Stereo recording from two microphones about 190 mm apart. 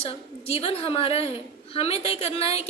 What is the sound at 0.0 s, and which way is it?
A woman's voice, 30° left (ahead or behind).